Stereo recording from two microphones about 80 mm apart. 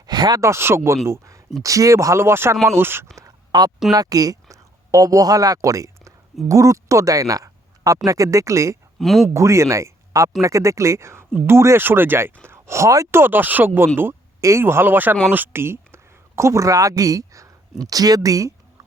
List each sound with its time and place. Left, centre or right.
0.0 s a sound: right
0.3 s speech: right
3.5 s speech: right
3.9 s speech: right
9.0 s speech: centre
9.3 s speech: right
13.1 s speech: right